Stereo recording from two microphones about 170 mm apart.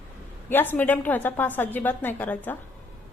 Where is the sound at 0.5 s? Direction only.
10° left (ahead or behind).